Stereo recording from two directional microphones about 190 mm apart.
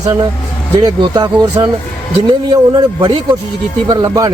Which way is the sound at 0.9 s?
20° right (ahead or behind).